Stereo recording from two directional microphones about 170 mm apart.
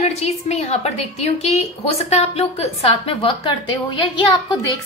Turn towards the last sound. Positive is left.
turn(degrees=30)  # may be behind; listen again after turning